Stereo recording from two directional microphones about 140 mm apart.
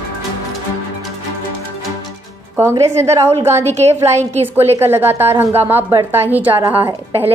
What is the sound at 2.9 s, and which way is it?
Speech, 20° right (ahead or behind).